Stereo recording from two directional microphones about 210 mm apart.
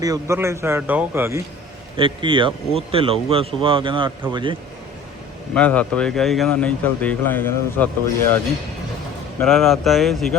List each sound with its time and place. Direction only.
0.0 s speech: 15° right (ahead or behind)
2.0 s speech: 25° right (ahead or behind)
5.5 s speech: 5° left (ahead or behind)
9.4 s speech: centre (ahead or behind)